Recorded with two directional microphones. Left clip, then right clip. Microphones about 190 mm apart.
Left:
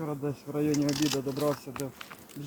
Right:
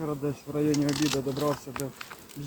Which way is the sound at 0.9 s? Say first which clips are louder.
Right 1 dB; centre (ahead or behind).